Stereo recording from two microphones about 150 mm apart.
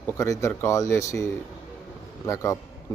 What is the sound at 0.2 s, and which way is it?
Speech, 20° left (ahead or behind).